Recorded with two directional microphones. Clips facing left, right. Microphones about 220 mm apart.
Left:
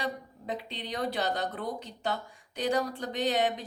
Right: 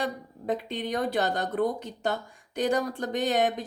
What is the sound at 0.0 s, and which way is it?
Speech, 50° right (ahead or behind).